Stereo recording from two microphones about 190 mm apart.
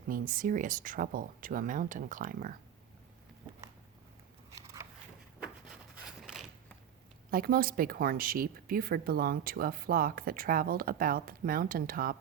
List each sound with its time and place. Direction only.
0.1 s speech: 45° right (ahead or behind)
5.4 s a sound: 5° right (ahead or behind)
7.3 s speech: 50° right (ahead or behind)